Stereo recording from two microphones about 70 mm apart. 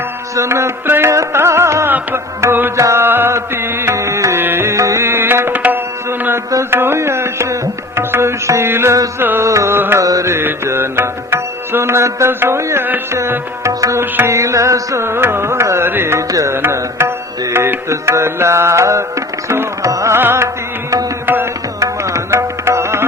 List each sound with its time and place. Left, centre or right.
0.3 s music: right
2.7 s music: right
5.0 s tabla: right
6.1 s music: right
9.4 s music: right
10.0 s carnatic music: right
10.3 s music: right
16.3 s music: right
16.6 s music: right
20.1 s music: right
21.8 s music: right